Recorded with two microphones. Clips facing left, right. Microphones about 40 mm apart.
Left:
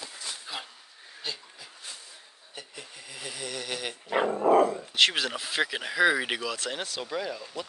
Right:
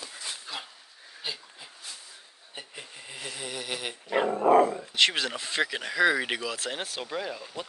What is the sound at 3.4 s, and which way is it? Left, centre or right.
Speech, centre.